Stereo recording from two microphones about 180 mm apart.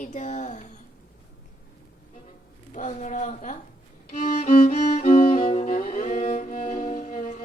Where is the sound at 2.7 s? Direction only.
45° left (ahead or behind).